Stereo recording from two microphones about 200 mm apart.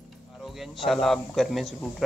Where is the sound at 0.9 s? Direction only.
Centre (ahead or behind).